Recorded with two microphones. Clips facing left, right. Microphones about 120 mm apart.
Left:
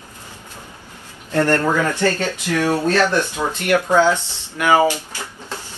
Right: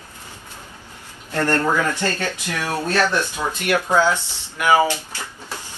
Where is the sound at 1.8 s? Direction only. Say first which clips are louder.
Left 4 dB; 15° right (ahead or behind).